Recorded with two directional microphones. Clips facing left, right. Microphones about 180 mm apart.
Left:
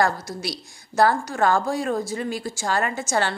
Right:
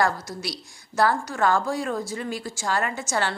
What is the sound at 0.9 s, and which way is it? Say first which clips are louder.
A woman's voice: left 3 dB; 35° left (ahead or behind).